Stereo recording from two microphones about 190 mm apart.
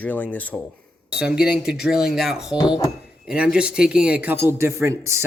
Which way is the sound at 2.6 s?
25° left (ahead or behind).